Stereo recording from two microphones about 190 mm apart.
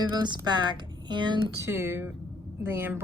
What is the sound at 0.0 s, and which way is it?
Speech, 25° right (ahead or behind).